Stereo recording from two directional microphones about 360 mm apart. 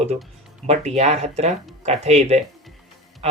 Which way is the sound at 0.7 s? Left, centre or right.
Centre.